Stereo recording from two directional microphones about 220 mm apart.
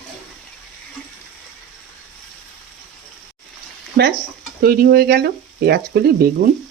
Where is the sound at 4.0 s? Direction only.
50° right (ahead or behind).